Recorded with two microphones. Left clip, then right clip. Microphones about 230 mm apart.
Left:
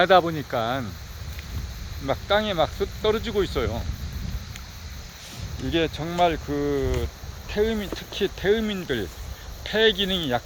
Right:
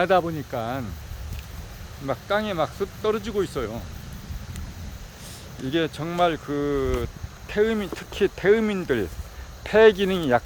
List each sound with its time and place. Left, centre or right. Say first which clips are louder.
0.0 s speech: left 3 dB; centre
2.0 s speech: left 2 dB; centre
5.7 s speech: left 1 dB; centre